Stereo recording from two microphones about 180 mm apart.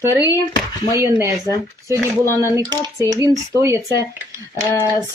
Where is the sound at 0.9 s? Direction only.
20° right (ahead or behind).